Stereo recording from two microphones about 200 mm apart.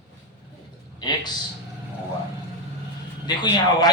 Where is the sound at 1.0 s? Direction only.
20° left (ahead or behind).